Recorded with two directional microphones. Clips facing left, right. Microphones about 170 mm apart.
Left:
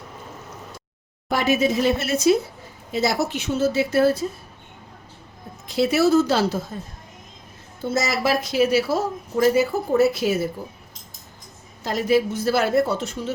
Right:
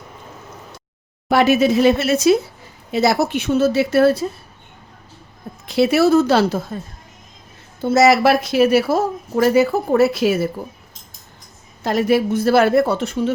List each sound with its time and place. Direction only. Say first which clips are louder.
1.3 s a woman's voice: right 6 dB; 75° right (ahead or behind)
2.9 s a woman's voice: right 5 dB; 70° right (ahead or behind)
5.6 s speech: right 4 dB; 70° right (ahead or behind)
7.9 s a woman's voice: right 9 dB; 75° right (ahead or behind); by 9.0 s 55° right (ahead or behind)
9.3 s a woman's voice: right 4 dB; 70° right (ahead or behind)
11.8 s speech: right 3 dB; 65° right (ahead or behind)